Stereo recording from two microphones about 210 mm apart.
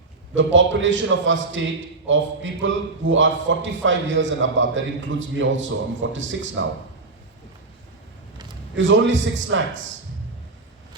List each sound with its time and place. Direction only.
0.3 s a man's voice: 65° right (ahead or behind)
8.7 s a man's voice: 65° right (ahead or behind)